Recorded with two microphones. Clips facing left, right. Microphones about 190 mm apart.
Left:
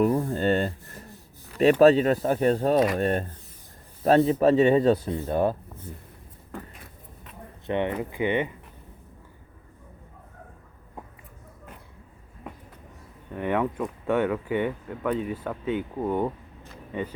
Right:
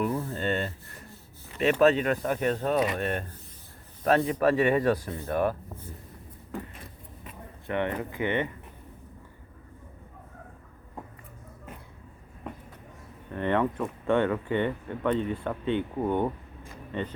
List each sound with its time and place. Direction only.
0.0 s speech: 40° left (ahead or behind); by 5.5 s 20° left (ahead or behind)
7.7 s speech: 20° left (ahead or behind)
13.3 s speech: 10° left (ahead or behind)